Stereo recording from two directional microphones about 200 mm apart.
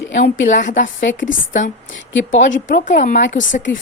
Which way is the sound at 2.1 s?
65° left (ahead or behind).